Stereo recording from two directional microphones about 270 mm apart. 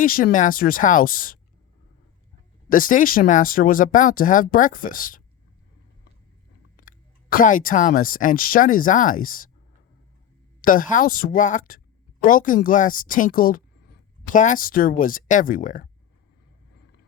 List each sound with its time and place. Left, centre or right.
0.0 s speech: left
2.6 s speech: left
6.7 s speech: left
10.6 s speech: left